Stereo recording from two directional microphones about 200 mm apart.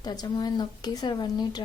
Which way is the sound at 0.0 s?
20° left (ahead or behind).